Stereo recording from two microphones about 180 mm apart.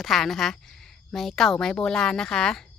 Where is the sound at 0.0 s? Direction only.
Centre (ahead or behind).